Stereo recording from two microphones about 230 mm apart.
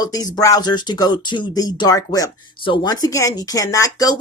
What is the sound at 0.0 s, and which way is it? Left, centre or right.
Speech, centre.